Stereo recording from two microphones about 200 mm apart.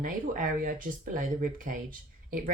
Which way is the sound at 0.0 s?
45° right (ahead or behind).